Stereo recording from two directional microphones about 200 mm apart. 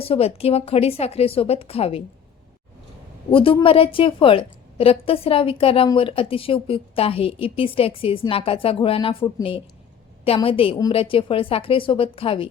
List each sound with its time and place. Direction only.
0.0 s a woman's voice: 30° left (ahead or behind)
3.3 s a woman's voice: 25° left (ahead or behind)